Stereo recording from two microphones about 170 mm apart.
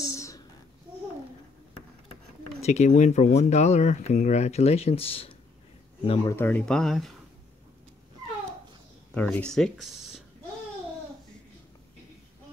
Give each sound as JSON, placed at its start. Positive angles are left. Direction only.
{"t": 0.0, "sound": "a sound", "side_deg": 20}
{"t": 2.6, "sound": "speech", "side_deg": 40}
{"t": 6.2, "sound": "speech", "side_deg": 15}
{"t": 9.1, "sound": "speech", "side_deg": 10}